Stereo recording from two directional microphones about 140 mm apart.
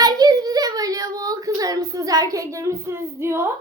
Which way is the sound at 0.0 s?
25° right (ahead or behind).